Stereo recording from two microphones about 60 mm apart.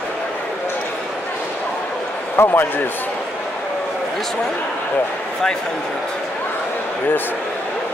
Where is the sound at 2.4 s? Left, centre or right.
Left.